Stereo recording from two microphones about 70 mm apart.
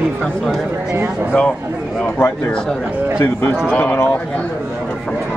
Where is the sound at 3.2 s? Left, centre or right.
Left.